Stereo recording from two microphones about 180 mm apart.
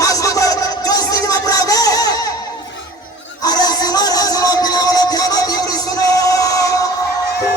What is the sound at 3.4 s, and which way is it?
Music, 20° left (ahead or behind).